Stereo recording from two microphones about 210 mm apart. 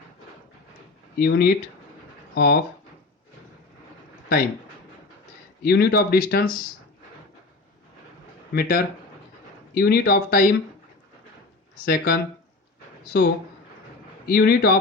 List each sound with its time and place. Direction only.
1.2 s speech: 45° left (ahead or behind)
5.6 s speech: 50° left (ahead or behind)
8.5 s speech: 45° left (ahead or behind)
11.9 s speech: 50° left (ahead or behind)